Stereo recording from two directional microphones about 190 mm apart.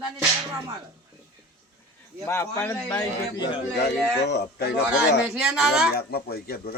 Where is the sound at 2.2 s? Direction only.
15° left (ahead or behind).